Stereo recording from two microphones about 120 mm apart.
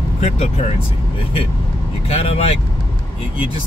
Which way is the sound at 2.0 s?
60° left (ahead or behind).